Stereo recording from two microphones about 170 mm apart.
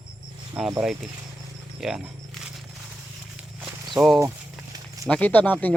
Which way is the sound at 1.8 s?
5° right (ahead or behind).